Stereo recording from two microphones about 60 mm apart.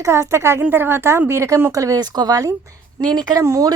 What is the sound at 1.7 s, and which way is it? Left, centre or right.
Speech, right.